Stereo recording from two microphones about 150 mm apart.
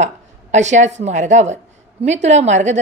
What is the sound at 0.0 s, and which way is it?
Speech, 50° right (ahead or behind).